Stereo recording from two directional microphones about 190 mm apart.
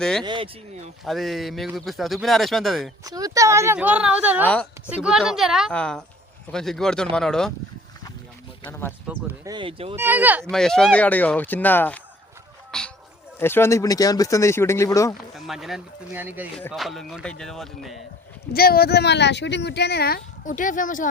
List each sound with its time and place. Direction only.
0.0 s speech: 5° left (ahead or behind)
0.3 s speech: 25° right (ahead or behind)
1.0 s speech: centre (ahead or behind)
3.0 s speech: 20° right (ahead or behind); by 7.5 s 5° left (ahead or behind)
9.0 s speech: 10° right (ahead or behind)
9.5 s speech: 25° right (ahead or behind)
9.9 s speech: 10° right (ahead or behind)
10.5 s speech: 5° left (ahead or behind)
15.4 s speech: centre (ahead or behind)
16.6 s speech: centre (ahead or behind)
18.5 s speech: 55° left (ahead or behind)